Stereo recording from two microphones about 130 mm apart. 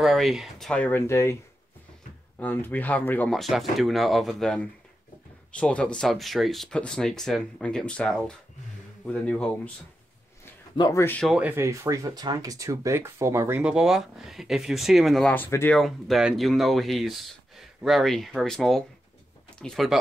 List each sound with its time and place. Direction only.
0.0 s speech: centre (ahead or behind); by 1.3 s 20° left (ahead or behind)
2.3 s speech: 15° left (ahead or behind)
3.3 s speech: centre (ahead or behind)
10.8 s speech: 25° left (ahead or behind)
11.2 s speech: 10° right (ahead or behind)
13.6 s speech: 5° right (ahead or behind)
15.3 s speech: 15° left (ahead or behind)
15.8 s speech: centre (ahead or behind)